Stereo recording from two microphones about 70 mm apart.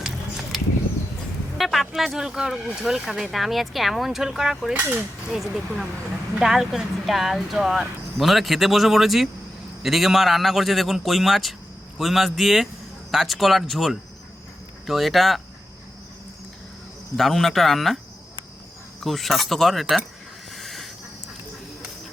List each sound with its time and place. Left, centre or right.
1.5 s speech: centre
4.8 s speech: right
5.3 s speech: centre
17.2 s speech: centre
20.5 s hiss: centre